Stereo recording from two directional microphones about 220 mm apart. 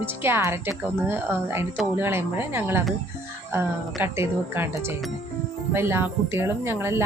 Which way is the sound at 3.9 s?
10° right (ahead or behind).